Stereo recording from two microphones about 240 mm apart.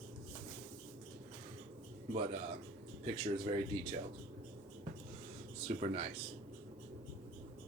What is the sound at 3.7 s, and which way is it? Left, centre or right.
Speech, right.